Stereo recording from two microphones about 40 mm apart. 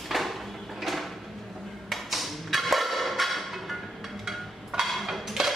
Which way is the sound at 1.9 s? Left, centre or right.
Centre.